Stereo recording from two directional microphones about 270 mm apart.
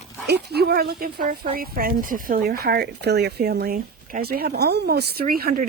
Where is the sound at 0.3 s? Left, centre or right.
Right.